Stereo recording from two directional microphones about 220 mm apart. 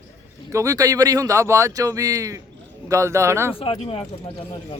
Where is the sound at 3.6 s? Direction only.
25° left (ahead or behind).